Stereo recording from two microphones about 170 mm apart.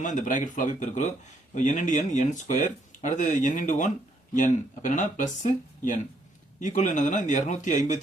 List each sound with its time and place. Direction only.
0.0 s speech: 50° left (ahead or behind)